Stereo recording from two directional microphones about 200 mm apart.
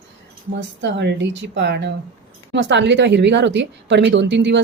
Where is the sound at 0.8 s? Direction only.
60° right (ahead or behind).